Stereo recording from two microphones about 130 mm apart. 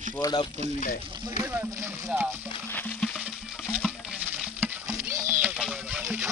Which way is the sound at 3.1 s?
10° right (ahead or behind).